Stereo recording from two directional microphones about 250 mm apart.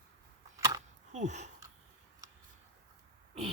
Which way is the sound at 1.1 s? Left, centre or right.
Right.